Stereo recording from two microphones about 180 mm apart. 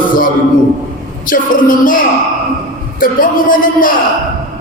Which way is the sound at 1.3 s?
50° left (ahead or behind).